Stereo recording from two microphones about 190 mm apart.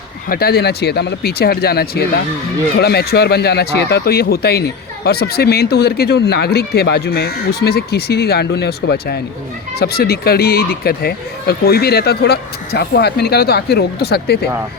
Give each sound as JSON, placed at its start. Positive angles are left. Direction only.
{"t": 0.3, "sound": "speech", "side_deg": 55}